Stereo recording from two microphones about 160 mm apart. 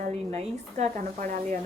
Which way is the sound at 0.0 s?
45° right (ahead or behind).